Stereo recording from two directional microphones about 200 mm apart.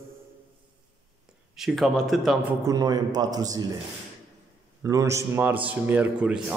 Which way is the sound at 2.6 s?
20° right (ahead or behind).